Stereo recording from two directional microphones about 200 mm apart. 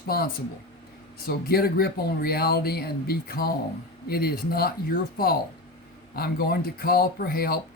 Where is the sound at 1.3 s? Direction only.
50° left (ahead or behind).